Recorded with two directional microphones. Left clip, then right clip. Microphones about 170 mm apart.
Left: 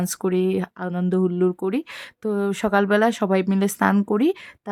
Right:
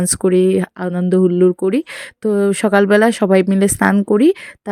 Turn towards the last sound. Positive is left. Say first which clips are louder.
# right 8 dB
turn(degrees=-25)  # may be behind; listen again after turning